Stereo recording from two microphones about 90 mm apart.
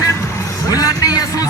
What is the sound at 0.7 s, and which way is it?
Speech, 40° left (ahead or behind).